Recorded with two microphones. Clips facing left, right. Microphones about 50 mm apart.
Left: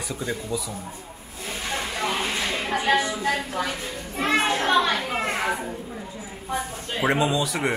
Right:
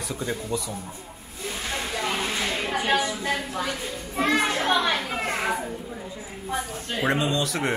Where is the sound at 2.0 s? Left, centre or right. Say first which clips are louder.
Left 1 dB; left.